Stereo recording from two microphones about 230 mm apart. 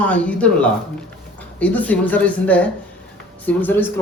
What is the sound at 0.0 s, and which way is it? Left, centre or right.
Speech, centre.